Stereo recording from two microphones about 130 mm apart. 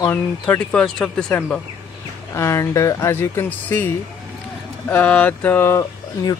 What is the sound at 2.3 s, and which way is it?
Speech, 20° left (ahead or behind).